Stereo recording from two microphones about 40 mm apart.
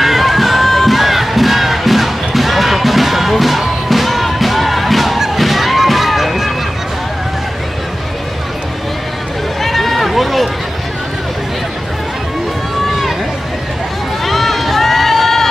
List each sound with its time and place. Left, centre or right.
0.0 s crowd: centre
9.6 s run: centre
14.2 s run: centre